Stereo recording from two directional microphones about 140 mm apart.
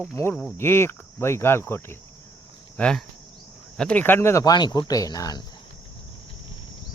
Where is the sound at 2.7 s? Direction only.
5° left (ahead or behind).